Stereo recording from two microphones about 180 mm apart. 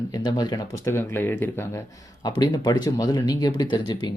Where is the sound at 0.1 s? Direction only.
20° left (ahead or behind).